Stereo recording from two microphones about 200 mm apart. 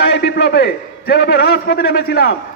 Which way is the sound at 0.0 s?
60° left (ahead or behind).